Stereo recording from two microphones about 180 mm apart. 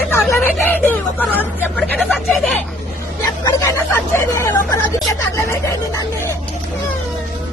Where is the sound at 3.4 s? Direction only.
15° left (ahead or behind).